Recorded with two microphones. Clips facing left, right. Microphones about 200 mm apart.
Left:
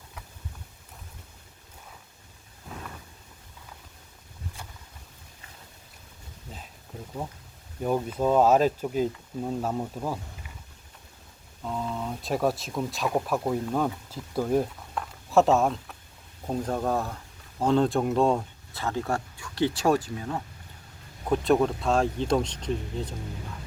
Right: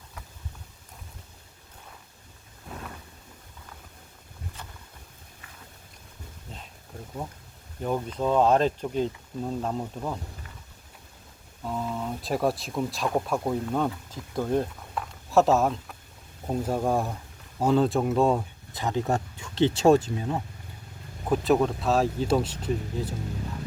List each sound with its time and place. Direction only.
7.8 s speech: 10° left (ahead or behind)
11.6 s speech: 5° right (ahead or behind)
18.7 s speech: 15° right (ahead or behind)
21.2 s speech: centre (ahead or behind)